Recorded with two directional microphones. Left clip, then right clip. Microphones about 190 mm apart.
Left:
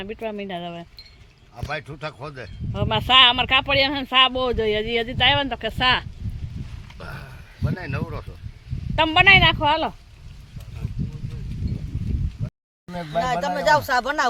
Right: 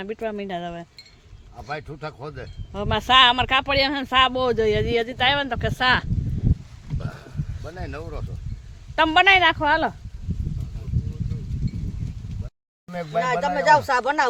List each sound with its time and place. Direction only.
0.0 s speech: 5° right (ahead or behind)
1.5 s speech: 15° left (ahead or behind)
2.7 s speech: 5° right (ahead or behind)
6.8 s a sound: 15° right (ahead or behind)
7.8 s speech: 30° right (ahead or behind)
9.0 s speech: 10° right (ahead or behind)
12.9 s speech: 5° left (ahead or behind)
13.7 s speech: 20° right (ahead or behind)